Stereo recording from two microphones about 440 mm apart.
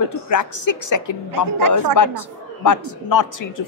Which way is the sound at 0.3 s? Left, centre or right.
Left.